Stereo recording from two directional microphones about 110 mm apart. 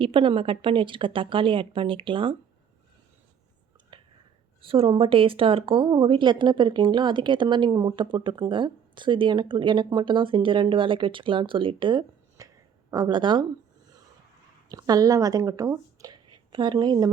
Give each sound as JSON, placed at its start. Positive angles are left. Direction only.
{"t": 0.0, "sound": "speech", "side_deg": -55}
{"t": 3.9, "sound": "whispering", "side_deg": -45}
{"t": 4.6, "sound": "speech", "side_deg": -55}
{"t": 12.4, "sound": "a sound", "side_deg": -35}
{"t": 14.7, "sound": "speech", "side_deg": -35}
{"t": 16.0, "sound": "whispering", "side_deg": -35}